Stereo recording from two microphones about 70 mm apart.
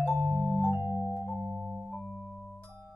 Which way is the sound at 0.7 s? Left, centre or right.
Right.